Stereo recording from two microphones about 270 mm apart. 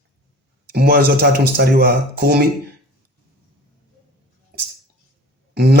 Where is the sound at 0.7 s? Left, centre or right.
Right.